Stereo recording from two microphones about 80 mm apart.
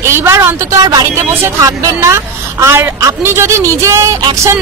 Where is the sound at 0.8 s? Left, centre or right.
Right.